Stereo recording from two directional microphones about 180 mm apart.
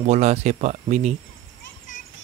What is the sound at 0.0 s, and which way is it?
Speech, 40° right (ahead or behind).